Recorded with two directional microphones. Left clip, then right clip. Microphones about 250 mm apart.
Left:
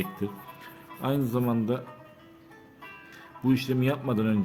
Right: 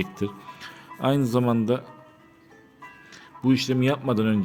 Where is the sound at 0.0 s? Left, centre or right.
Centre.